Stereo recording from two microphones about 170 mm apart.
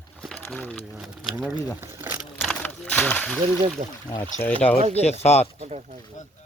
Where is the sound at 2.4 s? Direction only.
10° left (ahead or behind).